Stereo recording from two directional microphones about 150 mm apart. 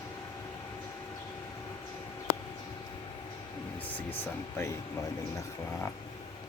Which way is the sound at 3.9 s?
15° left (ahead or behind).